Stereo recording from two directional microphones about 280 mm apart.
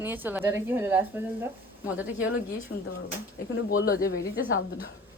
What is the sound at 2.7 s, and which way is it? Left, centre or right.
Speech, left.